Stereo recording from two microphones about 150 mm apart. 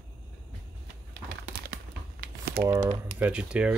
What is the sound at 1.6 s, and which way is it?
Crumpling, 85° right.